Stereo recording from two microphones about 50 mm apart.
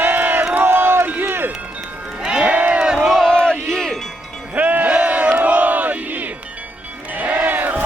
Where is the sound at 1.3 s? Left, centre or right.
Right.